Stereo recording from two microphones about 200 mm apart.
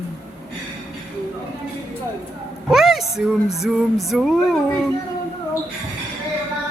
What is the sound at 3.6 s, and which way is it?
Music, centre (ahead or behind).